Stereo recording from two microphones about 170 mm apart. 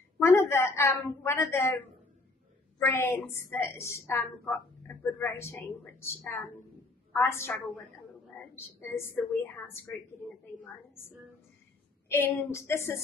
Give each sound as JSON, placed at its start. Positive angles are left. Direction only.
{"t": 0.2, "sound": "a woman's voice", "side_deg": 15}
{"t": 12.1, "sound": "a woman's voice", "side_deg": 15}